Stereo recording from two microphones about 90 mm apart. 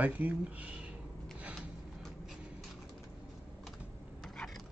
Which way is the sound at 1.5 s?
Centre (ahead or behind).